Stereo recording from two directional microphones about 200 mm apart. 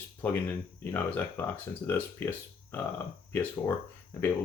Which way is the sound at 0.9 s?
10° left (ahead or behind).